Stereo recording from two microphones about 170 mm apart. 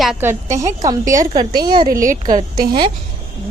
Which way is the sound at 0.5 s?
20° right (ahead or behind).